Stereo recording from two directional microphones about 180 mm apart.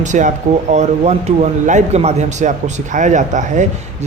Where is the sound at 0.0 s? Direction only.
45° right (ahead or behind).